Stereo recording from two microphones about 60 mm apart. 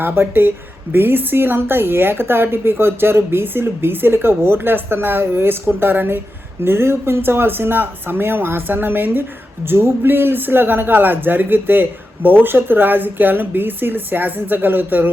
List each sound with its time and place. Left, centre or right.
0.0 s a man's voice: right